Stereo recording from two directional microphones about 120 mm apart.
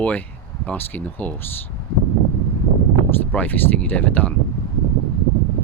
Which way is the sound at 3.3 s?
15° left (ahead or behind).